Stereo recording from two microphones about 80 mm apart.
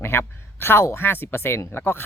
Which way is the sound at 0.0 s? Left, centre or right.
Left.